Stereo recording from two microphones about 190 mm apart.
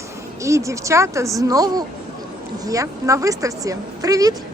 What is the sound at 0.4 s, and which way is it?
A woman's voice, 15° right (ahead or behind).